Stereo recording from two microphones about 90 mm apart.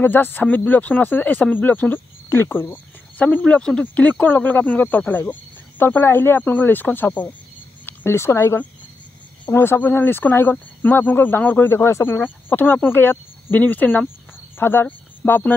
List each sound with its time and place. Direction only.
0.0 s speech: 20° left (ahead or behind)